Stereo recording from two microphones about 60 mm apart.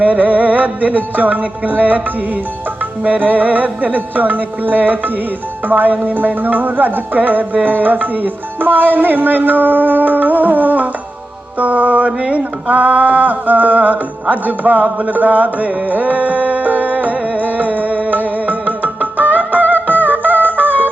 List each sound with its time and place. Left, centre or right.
0.0 s music: right
5.6 s speech: right
11.6 s mantra: right
19.7 s music: right